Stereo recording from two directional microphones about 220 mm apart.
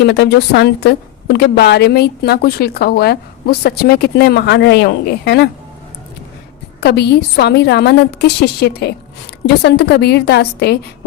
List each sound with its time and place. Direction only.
0.0 s a woman's voice: 50° left (ahead or behind)
6.7 s a woman's voice: 50° left (ahead or behind)